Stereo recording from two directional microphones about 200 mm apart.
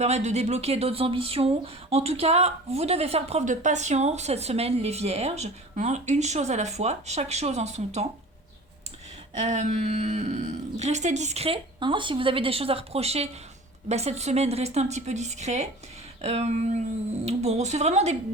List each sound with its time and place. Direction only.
0.0 s speech: 35° right (ahead or behind)
9.3 s speech: 35° right (ahead or behind)